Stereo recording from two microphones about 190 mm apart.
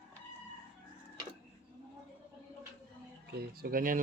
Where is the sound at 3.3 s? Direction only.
50° right (ahead or behind).